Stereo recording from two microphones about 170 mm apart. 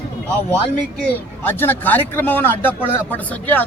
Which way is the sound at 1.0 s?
10° left (ahead or behind).